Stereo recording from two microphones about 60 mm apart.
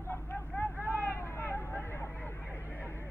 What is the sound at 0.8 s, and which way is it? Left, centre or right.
Hubbub, left.